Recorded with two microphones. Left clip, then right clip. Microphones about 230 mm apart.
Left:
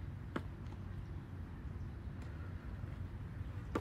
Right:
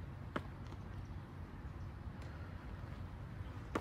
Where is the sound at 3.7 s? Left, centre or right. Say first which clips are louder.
Even; centre.